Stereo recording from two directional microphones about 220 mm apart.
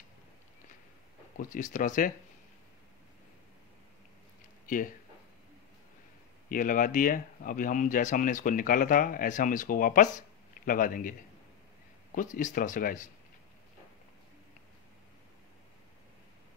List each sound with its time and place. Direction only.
1.4 s speech: 35° left (ahead or behind)
4.6 s speech: 40° left (ahead or behind)
6.5 s speech: 40° left (ahead or behind)
12.2 s speech: 35° left (ahead or behind)